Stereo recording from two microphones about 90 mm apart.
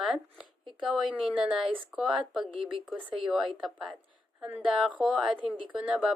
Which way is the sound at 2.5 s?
75° right (ahead or behind).